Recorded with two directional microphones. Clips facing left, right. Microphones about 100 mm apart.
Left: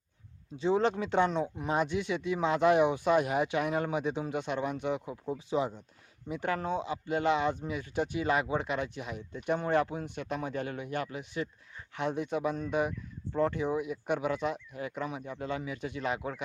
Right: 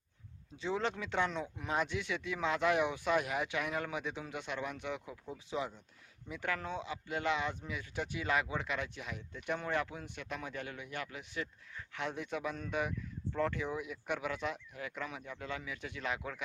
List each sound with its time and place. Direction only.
0.6 s speech: 30° left (ahead or behind)
11.9 s speech: 25° left (ahead or behind)